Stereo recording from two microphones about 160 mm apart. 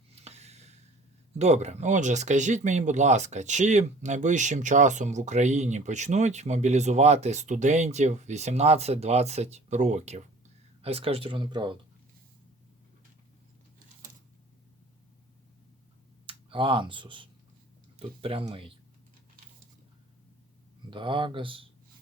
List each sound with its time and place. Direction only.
0.2 s a sound: 40° right (ahead or behind)
1.4 s speech: 45° right (ahead or behind); by 11.8 s 30° right (ahead or behind)
16.2 s speech: 35° right (ahead or behind)
20.9 s speech: 30° right (ahead or behind)